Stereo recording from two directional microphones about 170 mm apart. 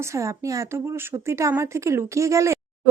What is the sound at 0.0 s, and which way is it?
A woman's voice, 15° right (ahead or behind).